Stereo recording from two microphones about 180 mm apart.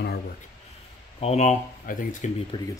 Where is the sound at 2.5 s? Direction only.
25° left (ahead or behind).